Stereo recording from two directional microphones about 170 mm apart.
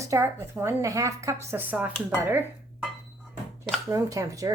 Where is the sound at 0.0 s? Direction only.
15° right (ahead or behind).